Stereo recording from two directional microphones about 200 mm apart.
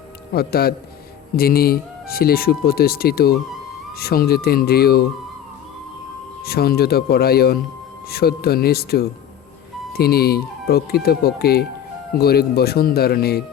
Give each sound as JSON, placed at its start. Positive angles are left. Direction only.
{"t": 0.3, "sound": "speech", "side_deg": 50}
{"t": 6.4, "sound": "speech", "side_deg": 50}